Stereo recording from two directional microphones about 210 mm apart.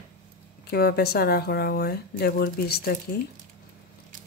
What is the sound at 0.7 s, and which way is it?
Speech, 50° left (ahead or behind).